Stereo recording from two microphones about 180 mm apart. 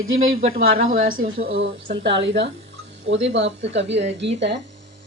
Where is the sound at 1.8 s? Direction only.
80° right.